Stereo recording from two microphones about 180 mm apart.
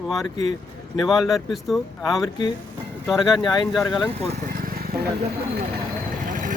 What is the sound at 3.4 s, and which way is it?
Speech, 25° left (ahead or behind).